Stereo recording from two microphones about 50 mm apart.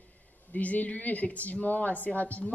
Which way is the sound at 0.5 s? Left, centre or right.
Left.